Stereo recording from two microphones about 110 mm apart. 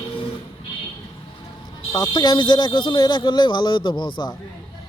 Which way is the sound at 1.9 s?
40° left (ahead or behind).